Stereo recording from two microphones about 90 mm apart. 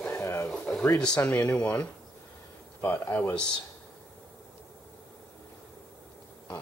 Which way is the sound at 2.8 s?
20° left (ahead or behind).